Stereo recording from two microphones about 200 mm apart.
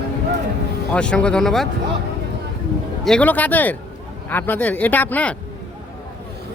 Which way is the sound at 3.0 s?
5° left (ahead or behind).